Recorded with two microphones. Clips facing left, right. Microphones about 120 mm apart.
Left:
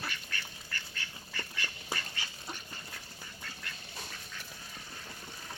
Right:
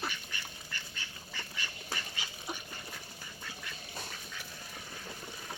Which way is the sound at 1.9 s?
15° right (ahead or behind).